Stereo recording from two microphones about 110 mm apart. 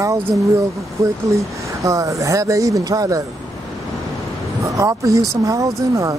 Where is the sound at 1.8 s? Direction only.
30° right (ahead or behind).